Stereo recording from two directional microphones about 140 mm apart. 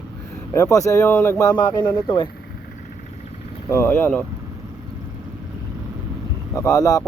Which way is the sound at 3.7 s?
15° left (ahead or behind).